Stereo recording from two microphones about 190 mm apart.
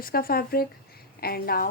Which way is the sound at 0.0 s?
50° left (ahead or behind).